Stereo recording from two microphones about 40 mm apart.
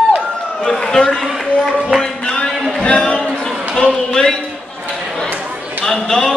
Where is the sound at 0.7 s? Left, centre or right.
Left.